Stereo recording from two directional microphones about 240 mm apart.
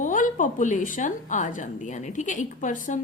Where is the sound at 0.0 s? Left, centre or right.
Left.